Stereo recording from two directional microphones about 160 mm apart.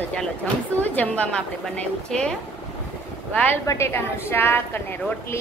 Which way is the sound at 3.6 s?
20° left (ahead or behind).